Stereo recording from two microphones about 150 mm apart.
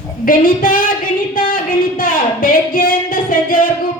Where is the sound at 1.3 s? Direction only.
65° left (ahead or behind).